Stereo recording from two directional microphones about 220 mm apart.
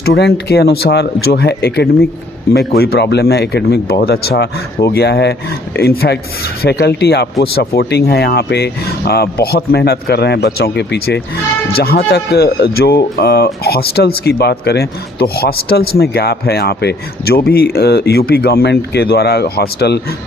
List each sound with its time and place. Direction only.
0.0 s speech: 50° left (ahead or behind)